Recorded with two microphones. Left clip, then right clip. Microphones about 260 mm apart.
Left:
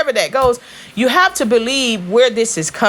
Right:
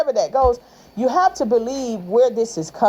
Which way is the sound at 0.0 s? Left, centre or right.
Left.